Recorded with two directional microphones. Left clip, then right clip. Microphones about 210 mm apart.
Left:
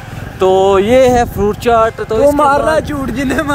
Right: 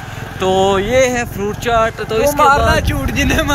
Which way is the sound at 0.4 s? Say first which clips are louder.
Left 4 dB; 45° left (ahead or behind).